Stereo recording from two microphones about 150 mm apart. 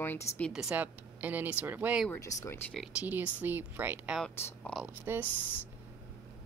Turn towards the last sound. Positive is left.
turn(degrees=10)  # may be behind; listen again after turning